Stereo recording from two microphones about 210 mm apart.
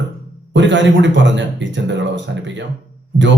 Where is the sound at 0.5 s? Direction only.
60° right (ahead or behind).